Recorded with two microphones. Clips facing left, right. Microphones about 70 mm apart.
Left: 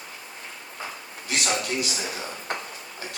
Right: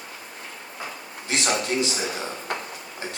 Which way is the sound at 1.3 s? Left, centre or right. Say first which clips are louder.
Right 2 dB; right.